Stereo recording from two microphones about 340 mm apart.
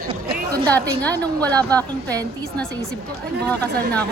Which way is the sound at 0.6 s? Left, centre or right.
Centre.